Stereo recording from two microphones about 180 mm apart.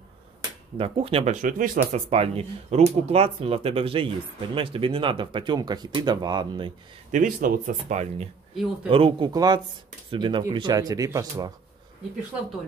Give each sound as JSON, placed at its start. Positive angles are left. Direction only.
{"t": 0.7, "sound": "speech", "side_deg": -30}
{"t": 7.1, "sound": "speech", "side_deg": -45}